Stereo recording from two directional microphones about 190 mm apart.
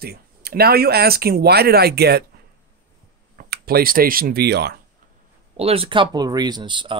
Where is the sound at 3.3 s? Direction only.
55° right (ahead or behind).